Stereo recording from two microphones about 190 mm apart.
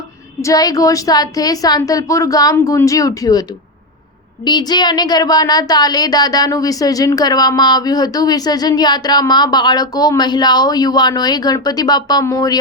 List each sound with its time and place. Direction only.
0.4 s speech: 20° left (ahead or behind)
4.4 s speech: 20° left (ahead or behind)